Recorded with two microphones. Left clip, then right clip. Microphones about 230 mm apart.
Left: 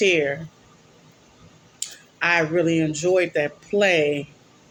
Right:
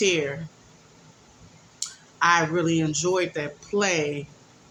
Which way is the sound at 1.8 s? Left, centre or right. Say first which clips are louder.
Right 1 dB; centre.